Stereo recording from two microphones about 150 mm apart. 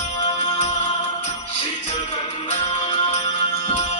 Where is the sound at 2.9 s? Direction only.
40° left (ahead or behind).